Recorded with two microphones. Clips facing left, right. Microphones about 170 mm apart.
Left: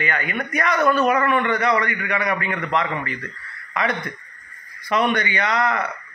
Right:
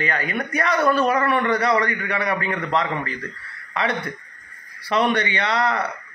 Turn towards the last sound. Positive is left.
turn(degrees=-35)  # may be behind; listen again after turning